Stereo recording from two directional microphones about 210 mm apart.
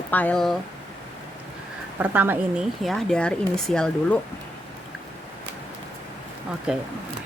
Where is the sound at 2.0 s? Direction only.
10° right (ahead or behind).